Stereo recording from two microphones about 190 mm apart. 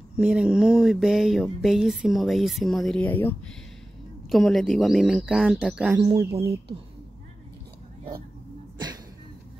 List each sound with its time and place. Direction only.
0.2 s speech: 5° right (ahead or behind)
5.9 s speech: 25° right (ahead or behind)
8.7 s a sound: 20° right (ahead or behind)